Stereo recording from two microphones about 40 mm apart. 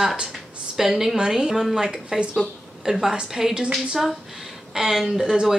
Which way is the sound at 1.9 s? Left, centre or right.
Right.